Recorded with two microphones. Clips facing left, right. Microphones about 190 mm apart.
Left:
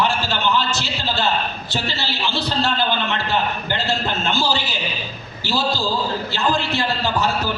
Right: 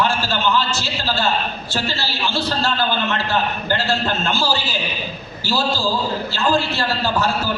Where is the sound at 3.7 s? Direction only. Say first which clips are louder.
Right 4 dB; 15° left (ahead or behind).